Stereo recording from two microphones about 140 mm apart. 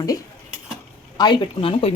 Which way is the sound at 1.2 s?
35° left (ahead or behind).